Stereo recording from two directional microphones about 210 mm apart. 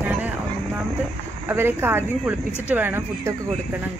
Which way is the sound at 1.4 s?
10° right (ahead or behind).